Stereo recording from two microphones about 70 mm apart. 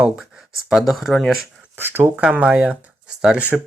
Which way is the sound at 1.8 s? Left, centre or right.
Right.